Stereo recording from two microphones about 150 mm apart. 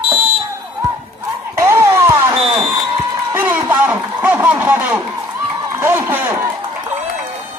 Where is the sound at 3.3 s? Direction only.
15° right (ahead or behind).